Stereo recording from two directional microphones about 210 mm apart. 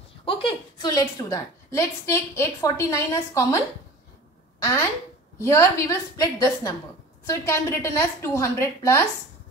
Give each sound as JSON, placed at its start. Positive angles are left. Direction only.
{"t": 0.2, "sound": "a woman's voice", "side_deg": 25}